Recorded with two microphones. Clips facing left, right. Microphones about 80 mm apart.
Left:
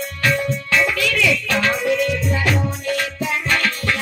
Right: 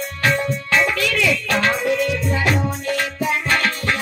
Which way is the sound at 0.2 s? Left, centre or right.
Right.